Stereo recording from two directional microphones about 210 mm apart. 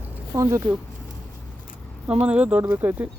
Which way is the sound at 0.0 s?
10° left (ahead or behind).